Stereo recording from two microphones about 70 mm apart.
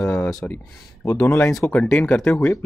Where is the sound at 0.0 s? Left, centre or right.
Left.